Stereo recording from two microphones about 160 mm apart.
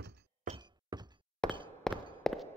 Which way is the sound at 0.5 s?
50° right (ahead or behind).